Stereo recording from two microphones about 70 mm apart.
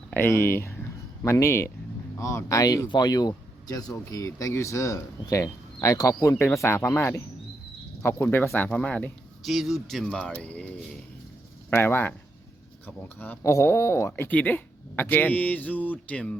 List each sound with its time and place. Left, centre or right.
0.1 s speech: left
6.4 s speech: left; by 9.1 s centre
9.4 s speech: centre
11.7 s speech: left
13.4 s speech: left
14.2 s speech: left